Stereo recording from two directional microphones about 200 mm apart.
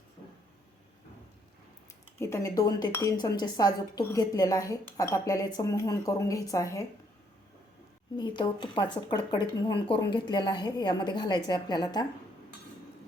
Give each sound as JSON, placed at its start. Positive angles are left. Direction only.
{"t": 2.1, "sound": "speech", "side_deg": 15}
{"t": 8.1, "sound": "speech", "side_deg": 20}